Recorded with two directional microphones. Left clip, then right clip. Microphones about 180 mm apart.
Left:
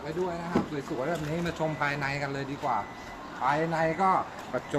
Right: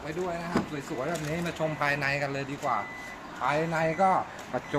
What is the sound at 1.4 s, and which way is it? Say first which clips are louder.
Speech: right 2 dB; 15° right (ahead or behind).